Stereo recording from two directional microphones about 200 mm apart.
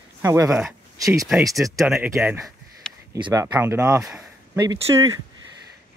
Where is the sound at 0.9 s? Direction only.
15° right (ahead or behind).